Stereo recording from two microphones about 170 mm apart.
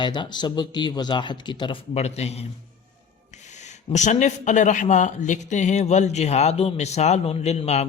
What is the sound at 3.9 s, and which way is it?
Speech, 45° left (ahead or behind).